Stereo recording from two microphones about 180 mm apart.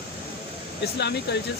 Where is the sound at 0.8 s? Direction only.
70° left (ahead or behind).